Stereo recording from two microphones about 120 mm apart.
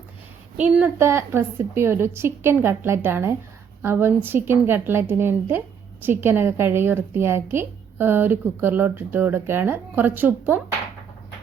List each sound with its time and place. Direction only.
0.5 s a woman's voice: 15° right (ahead or behind)